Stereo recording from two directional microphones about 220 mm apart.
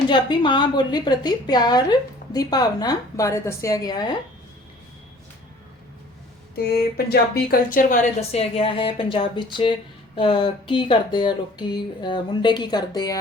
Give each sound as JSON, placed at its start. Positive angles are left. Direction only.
{"t": 0.1, "sound": "a woman's voice", "side_deg": 20}
{"t": 6.6, "sound": "speech", "side_deg": 45}